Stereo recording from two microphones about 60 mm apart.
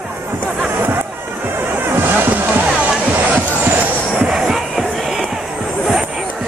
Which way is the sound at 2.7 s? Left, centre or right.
Centre.